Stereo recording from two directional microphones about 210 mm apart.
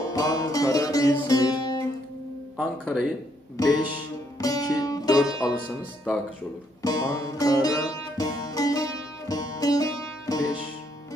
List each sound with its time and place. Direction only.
0.0 s music: 15° left (ahead or behind)
2.5 s speech: 5° right (ahead or behind)
3.5 s music: 15° left (ahead or behind)
5.4 s speech: 5° right (ahead or behind)
6.8 s music: 15° left (ahead or behind)